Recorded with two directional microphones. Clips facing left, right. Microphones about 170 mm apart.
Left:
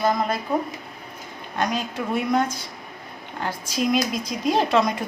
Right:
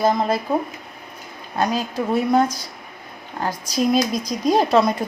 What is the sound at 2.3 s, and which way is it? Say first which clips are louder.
Speech: right 4 dB; 35° right (ahead or behind).